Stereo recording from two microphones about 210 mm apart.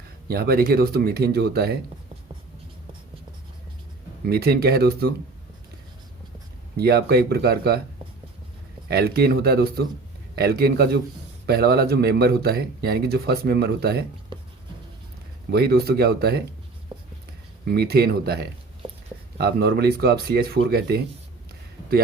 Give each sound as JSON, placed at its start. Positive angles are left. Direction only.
{"t": 0.3, "sound": "speech", "side_deg": -45}
{"t": 4.3, "sound": "speech", "side_deg": -50}
{"t": 6.7, "sound": "speech", "side_deg": -50}
{"t": 8.9, "sound": "speech", "side_deg": -50}
{"t": 14.3, "sound": "writing", "side_deg": -20}
{"t": 15.4, "sound": "speech", "side_deg": -50}
{"t": 16.9, "sound": "a sound", "side_deg": -25}
{"t": 17.7, "sound": "speech", "side_deg": -50}